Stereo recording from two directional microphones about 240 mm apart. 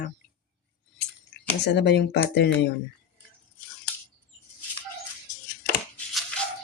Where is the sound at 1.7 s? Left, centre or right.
Left.